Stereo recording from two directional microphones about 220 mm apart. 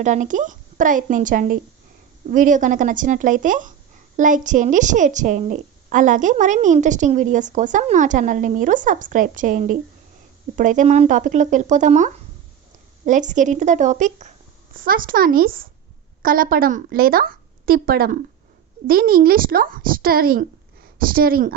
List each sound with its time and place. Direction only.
0.0 s a woman's voice: 35° right (ahead or behind)